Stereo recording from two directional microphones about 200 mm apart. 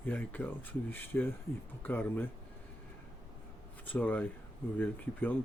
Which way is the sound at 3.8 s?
10° left (ahead or behind).